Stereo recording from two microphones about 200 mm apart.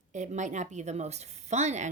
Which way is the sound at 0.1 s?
35° right (ahead or behind).